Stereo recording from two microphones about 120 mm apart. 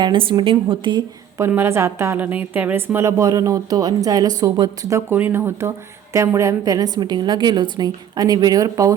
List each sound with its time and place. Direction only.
0.0 s a woman's voice: 45° right (ahead or behind)
1.4 s a woman's voice: 20° right (ahead or behind); by 4.9 s 35° right (ahead or behind)
4.9 s a woman's voice: 20° right (ahead or behind)